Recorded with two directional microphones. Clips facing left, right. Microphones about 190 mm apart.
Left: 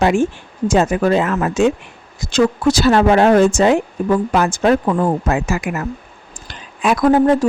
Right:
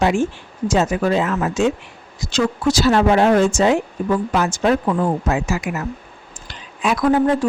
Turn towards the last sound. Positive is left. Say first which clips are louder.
# left 3 dB
turn(degrees=45)  # may be behind; listen again after turning